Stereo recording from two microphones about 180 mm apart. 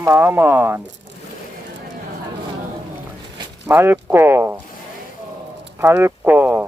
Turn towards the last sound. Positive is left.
turn(degrees=-10)  # may be behind; listen again after turning